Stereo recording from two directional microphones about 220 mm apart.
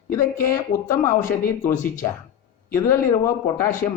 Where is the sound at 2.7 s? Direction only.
10° left (ahead or behind).